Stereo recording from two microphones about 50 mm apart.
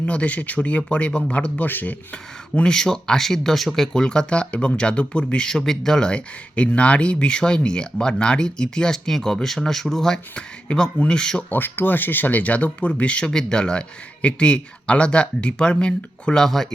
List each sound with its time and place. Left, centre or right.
0.1 s speech: left
1.6 s speech: left
2.6 s speech: centre
3.9 s speech: centre
10.3 s speech: left
11.4 s speech: left
16.4 s speech: centre